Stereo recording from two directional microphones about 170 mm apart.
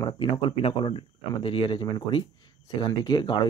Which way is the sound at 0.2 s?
30° left (ahead or behind).